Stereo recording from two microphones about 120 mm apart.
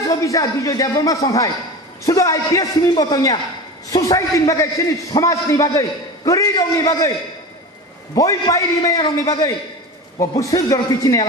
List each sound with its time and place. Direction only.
0.1 s a man's voice: 30° left (ahead or behind)
8.1 s a man's voice: 30° left (ahead or behind)